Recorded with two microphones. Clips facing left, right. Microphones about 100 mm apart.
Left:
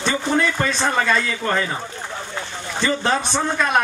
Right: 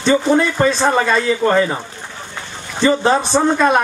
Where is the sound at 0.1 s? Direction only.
25° right (ahead or behind).